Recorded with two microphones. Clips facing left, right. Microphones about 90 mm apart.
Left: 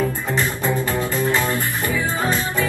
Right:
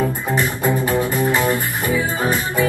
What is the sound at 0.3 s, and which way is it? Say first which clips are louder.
Music: right 2 dB; 20° right (ahead or behind).